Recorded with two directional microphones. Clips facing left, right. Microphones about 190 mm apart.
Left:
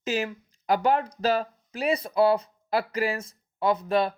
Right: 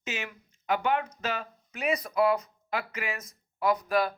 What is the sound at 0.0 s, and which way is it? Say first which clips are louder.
Speech: left 9 dB; 35° left (ahead or behind).